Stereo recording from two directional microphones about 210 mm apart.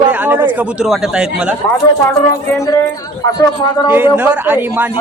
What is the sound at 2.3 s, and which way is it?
Speech, 15° left (ahead or behind).